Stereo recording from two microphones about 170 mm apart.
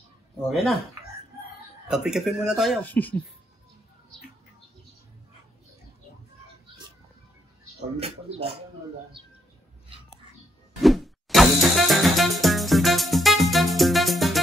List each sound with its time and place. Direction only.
0.5 s a man's voice: centre (ahead or behind)
1.9 s a man's voice: 5° right (ahead or behind)
2.8 s speech: 10° left (ahead or behind)
8.0 s speech: 35° right (ahead or behind)
10.8 s music: centre (ahead or behind)